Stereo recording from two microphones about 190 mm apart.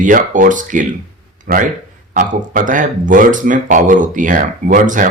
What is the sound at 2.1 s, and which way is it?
Speech, 45° right (ahead or behind).